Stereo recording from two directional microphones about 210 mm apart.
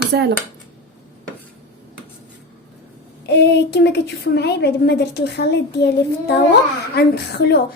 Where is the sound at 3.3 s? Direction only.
55° left (ahead or behind).